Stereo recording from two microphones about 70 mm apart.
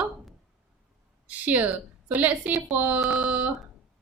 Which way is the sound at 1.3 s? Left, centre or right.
Right.